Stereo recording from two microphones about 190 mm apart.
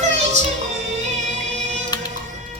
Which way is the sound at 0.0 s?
35° right (ahead or behind).